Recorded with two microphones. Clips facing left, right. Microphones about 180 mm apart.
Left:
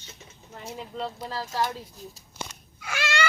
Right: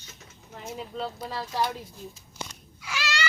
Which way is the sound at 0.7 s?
5° right (ahead or behind).